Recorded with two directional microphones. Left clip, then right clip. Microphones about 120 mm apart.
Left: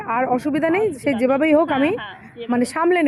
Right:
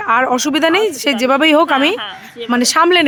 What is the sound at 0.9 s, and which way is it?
Speech, 35° right (ahead or behind).